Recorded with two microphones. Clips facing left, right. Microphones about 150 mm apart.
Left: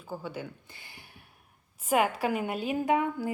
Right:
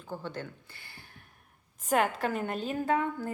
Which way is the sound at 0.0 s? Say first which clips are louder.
Left 1 dB; 10° left (ahead or behind).